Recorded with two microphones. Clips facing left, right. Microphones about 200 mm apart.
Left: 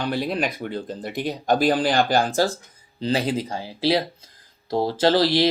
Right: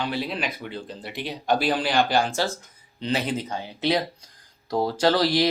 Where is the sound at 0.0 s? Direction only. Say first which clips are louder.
Left 4 dB; 45° left (ahead or behind).